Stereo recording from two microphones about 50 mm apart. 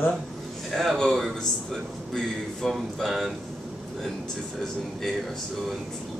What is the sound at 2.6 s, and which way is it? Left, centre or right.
Speech, centre.